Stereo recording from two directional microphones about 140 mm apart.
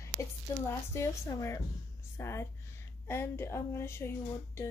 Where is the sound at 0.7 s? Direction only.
20° left (ahead or behind).